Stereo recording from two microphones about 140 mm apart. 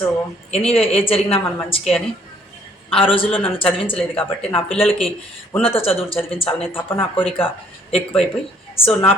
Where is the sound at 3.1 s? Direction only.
40° left (ahead or behind).